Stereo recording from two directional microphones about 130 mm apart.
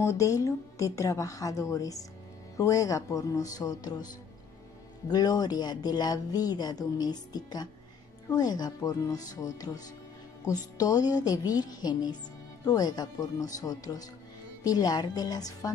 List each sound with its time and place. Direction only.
0.0 s a woman's voice: 20° left (ahead or behind)
5.1 s a woman's voice: 30° left (ahead or behind)